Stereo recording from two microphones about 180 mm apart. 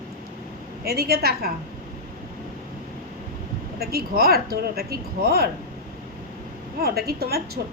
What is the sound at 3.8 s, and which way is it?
A woman's voice, 60° right (ahead or behind).